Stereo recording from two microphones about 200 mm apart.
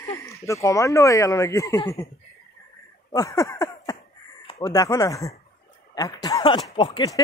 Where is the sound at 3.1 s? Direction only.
15° left (ahead or behind).